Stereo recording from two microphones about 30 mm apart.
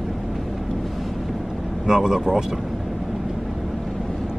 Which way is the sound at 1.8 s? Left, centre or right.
Right.